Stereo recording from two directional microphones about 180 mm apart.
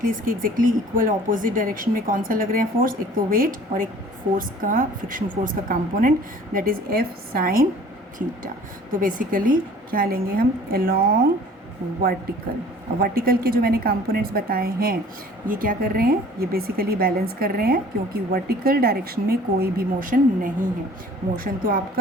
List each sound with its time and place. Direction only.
0.0 s speech: 50° right (ahead or behind)
9.0 s speech: 50° right (ahead or behind)
13.0 s a woman's voice: 55° right (ahead or behind)